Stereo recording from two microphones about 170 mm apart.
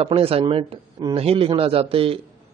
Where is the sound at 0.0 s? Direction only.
35° right (ahead or behind).